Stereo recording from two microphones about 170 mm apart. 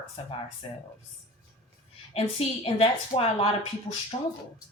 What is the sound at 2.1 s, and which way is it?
Speech, 35° left (ahead or behind).